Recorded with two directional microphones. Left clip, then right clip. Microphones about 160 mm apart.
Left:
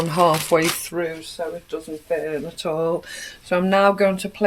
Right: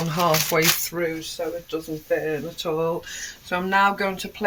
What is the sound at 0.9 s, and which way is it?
Speech, 40° left (ahead or behind).